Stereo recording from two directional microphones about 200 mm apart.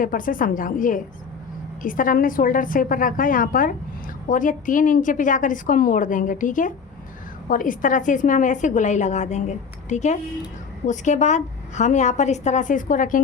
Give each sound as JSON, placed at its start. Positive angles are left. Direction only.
{"t": 0.0, "sound": "a woman's voice", "side_deg": 40}